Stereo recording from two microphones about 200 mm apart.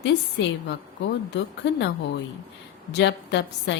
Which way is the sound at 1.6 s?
60° left (ahead or behind).